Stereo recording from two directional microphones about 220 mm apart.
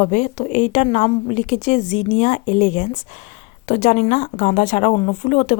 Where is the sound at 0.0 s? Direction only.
35° left (ahead or behind).